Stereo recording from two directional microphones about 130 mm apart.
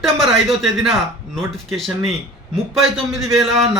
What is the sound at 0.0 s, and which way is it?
Speech, centre (ahead or behind).